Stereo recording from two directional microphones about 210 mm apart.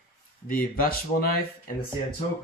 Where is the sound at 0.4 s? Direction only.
45° left (ahead or behind).